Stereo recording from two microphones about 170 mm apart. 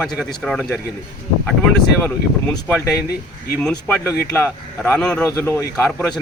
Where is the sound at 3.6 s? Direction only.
10° left (ahead or behind).